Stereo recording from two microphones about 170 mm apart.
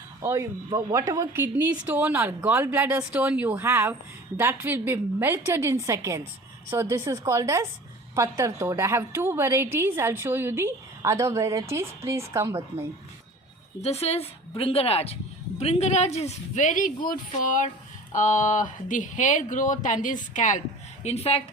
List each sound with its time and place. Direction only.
0.2 s a woman's voice: 15° right (ahead or behind)
13.8 s a woman's voice: 40° left (ahead or behind)